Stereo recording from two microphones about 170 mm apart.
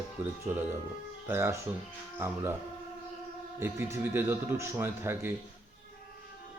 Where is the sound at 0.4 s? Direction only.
15° right (ahead or behind).